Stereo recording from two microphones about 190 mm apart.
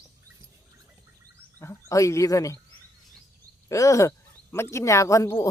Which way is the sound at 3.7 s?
15° left (ahead or behind).